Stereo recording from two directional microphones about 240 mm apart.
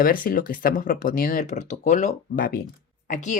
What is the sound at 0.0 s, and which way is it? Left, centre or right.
Speech, left.